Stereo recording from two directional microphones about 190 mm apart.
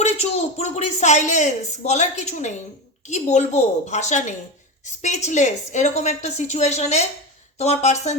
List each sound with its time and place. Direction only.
0.0 s speech: 35° left (ahead or behind)